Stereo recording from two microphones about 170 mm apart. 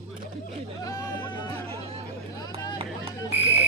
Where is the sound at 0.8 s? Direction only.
20° left (ahead or behind).